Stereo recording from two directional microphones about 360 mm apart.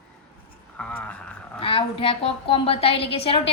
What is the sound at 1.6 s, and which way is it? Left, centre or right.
A woman's voice, centre.